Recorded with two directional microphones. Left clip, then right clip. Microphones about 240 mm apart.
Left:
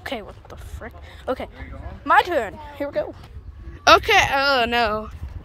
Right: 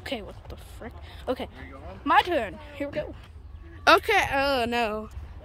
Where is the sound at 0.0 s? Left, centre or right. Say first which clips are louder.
Left 4 dB; centre.